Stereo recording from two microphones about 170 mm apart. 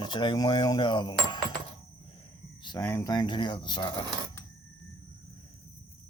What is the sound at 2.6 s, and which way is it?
Speech, 25° left (ahead or behind).